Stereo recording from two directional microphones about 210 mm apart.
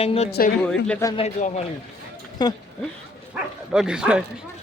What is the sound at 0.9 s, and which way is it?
Speech, 15° left (ahead or behind).